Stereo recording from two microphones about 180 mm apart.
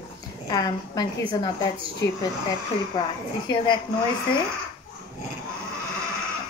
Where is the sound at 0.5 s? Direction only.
20° left (ahead or behind).